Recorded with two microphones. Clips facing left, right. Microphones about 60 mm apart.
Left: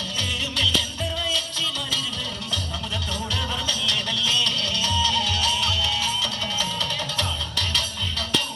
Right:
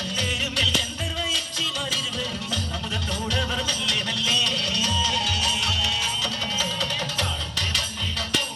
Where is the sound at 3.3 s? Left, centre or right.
Right.